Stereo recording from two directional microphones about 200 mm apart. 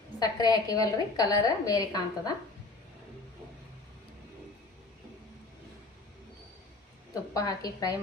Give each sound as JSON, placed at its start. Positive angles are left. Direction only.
{"t": 0.2, "sound": "a woman's voice", "side_deg": 20}
{"t": 7.1, "sound": "a woman's voice", "side_deg": 20}